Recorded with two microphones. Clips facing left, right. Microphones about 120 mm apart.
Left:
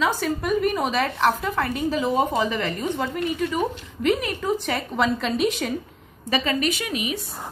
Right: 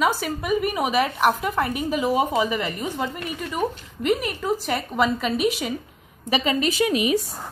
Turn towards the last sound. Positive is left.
turn(degrees=-35)  # may be behind; listen again after turning